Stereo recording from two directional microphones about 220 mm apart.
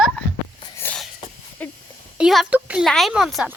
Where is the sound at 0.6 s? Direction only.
10° left (ahead or behind).